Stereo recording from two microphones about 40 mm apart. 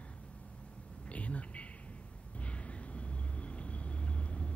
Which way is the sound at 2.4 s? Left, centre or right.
Left.